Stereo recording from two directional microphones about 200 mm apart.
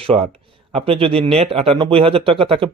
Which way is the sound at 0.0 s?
30° right (ahead or behind).